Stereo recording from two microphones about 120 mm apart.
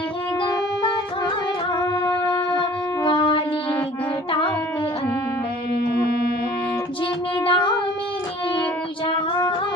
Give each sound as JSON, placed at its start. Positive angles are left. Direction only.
{"t": 2.6, "sound": "shofar", "side_deg": 35}
{"t": 7.4, "sound": "music", "side_deg": 45}